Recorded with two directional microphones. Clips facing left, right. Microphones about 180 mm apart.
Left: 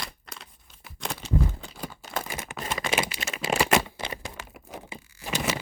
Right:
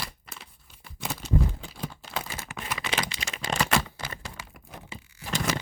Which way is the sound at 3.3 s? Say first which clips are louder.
Left 4 dB; 5° left (ahead or behind).